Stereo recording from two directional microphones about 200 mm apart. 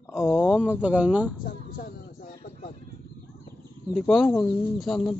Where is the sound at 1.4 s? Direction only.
45° left (ahead or behind).